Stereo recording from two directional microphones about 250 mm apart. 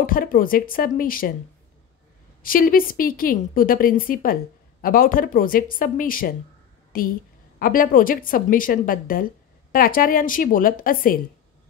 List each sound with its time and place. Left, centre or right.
0.0 s a woman's voice: left
2.4 s a woman's voice: left